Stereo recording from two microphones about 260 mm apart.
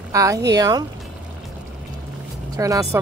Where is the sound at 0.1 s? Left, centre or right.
Centre.